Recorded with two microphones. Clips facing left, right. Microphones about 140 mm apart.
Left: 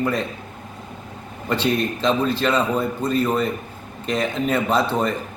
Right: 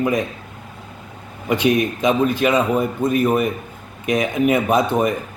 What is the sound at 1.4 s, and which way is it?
A man's voice, 15° right (ahead or behind).